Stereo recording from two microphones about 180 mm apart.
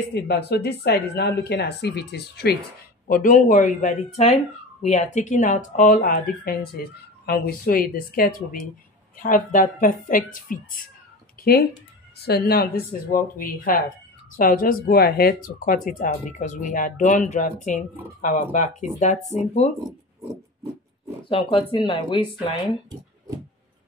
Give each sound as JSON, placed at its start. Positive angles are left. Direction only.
{"t": 0.1, "sound": "speech", "side_deg": 65}
{"t": 3.1, "sound": "speech", "side_deg": 50}
{"t": 12.3, "sound": "speech", "side_deg": 60}
{"t": 21.3, "sound": "speech", "side_deg": 30}